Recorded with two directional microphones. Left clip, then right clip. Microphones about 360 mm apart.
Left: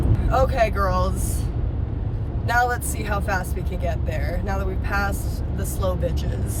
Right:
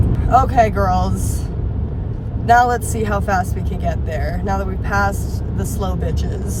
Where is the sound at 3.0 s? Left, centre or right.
Centre.